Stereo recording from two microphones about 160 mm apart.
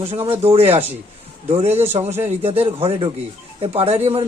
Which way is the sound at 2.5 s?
35° right (ahead or behind).